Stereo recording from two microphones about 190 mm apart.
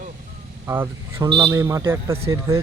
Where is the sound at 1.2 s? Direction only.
25° right (ahead or behind).